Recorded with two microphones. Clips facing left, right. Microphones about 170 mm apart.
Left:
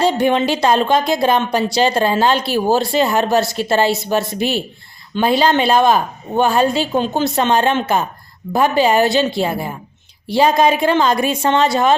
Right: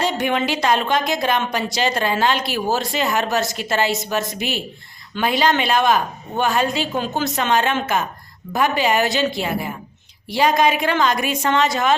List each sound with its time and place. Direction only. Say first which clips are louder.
0.0 s a woman's voice: left 6 dB; 30° left (ahead or behind)